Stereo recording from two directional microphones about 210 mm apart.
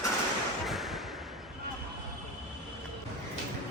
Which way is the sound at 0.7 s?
Centre (ahead or behind).